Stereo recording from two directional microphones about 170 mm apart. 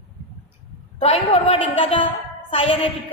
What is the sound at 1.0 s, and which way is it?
A woman's voice, 35° left (ahead or behind).